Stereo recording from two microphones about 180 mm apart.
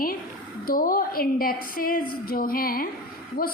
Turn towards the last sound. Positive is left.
turn(degrees=55)  # may be behind; listen again after turning